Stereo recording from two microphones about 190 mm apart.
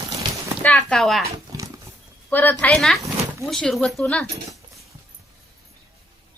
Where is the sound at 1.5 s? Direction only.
20° right (ahead or behind).